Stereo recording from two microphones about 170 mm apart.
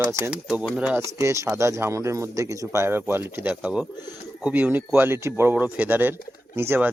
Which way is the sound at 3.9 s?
25° left (ahead or behind).